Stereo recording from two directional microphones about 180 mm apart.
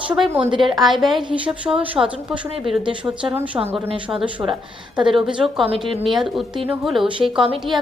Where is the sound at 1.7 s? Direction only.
15° right (ahead or behind).